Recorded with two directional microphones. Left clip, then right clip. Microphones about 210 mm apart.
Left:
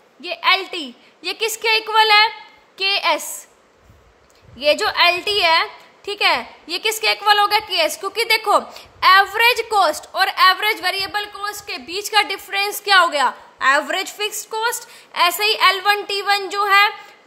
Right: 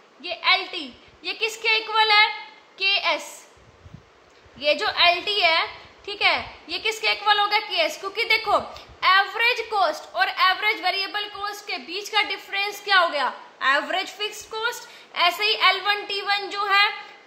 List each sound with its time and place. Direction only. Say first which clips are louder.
0.2 s a woman's voice: left 4 dB; 55° left (ahead or behind)
4.6 s a woman's voice: left 5 dB; 55° left (ahead or behind)